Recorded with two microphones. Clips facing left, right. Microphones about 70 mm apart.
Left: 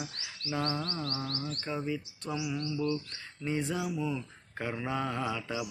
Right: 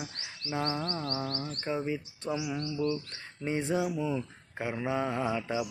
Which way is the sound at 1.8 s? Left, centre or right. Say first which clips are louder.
Right 2 dB; right.